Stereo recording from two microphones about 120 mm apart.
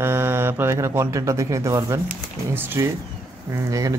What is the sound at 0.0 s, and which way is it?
A man's voice, 20° right (ahead or behind).